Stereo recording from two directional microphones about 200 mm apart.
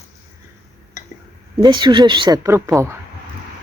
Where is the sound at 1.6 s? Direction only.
20° right (ahead or behind).